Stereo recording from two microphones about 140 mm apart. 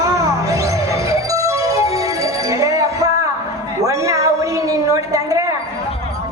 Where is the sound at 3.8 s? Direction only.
25° right (ahead or behind).